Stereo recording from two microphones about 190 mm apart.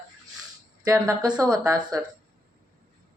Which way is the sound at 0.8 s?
20° right (ahead or behind).